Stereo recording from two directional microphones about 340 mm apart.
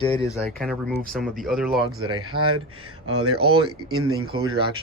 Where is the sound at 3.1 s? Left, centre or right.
Right.